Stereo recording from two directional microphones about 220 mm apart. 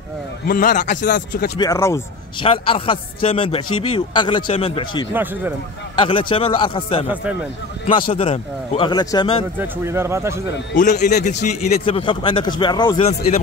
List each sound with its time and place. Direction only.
0.5 s a man's voice: 35° left (ahead or behind)
1.6 s speech: 15° left (ahead or behind)
5.1 s speech: 10° right (ahead or behind)
5.9 s speech: 25° left (ahead or behind)
8.1 s speech: 25° left (ahead or behind)
9.6 s speech: 10° right (ahead or behind)
10.8 s a man's voice: 35° left (ahead or behind)